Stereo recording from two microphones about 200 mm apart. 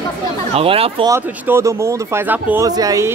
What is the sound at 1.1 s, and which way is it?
Speech, 10° right (ahead or behind).